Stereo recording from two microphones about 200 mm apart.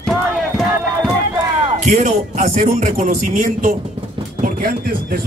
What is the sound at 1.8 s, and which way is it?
A man's voice, 40° right (ahead or behind).